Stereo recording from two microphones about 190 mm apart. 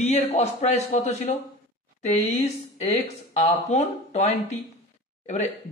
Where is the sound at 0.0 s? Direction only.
35° left (ahead or behind).